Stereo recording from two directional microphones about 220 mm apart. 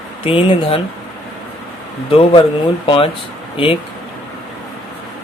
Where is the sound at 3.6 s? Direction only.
20° left (ahead or behind).